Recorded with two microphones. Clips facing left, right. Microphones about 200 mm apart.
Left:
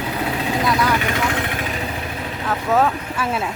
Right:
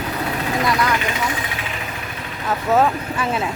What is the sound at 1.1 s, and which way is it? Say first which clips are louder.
Vehicle: left 3 dB; 65° left (ahead or behind).